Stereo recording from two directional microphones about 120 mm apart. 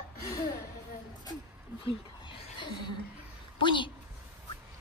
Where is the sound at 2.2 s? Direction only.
40° left (ahead or behind).